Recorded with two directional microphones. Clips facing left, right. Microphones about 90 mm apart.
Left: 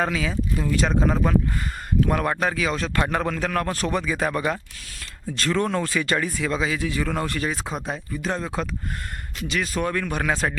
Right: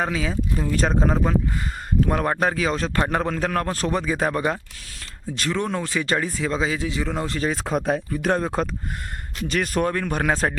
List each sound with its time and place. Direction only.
0.0 s a man's voice: 30° right (ahead or behind)
1.1 s a man's voice: 20° right (ahead or behind)
7.9 s a man's voice: 55° right (ahead or behind); by 10.5 s 40° right (ahead or behind)